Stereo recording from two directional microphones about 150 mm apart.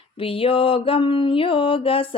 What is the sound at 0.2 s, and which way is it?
Mantra, 40° left (ahead or behind).